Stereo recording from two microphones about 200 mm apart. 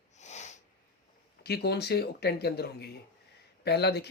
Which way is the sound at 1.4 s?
55° left (ahead or behind).